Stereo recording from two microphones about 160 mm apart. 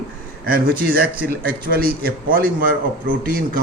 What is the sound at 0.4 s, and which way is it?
A man's voice, 65° right (ahead or behind).